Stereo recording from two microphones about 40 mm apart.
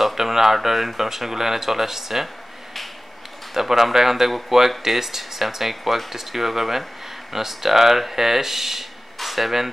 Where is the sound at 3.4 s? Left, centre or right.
Centre.